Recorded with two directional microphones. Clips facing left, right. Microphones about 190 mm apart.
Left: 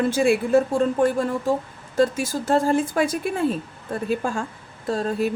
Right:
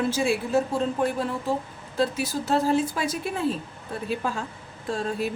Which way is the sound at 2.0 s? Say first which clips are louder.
Left 5 dB; 45° left (ahead or behind).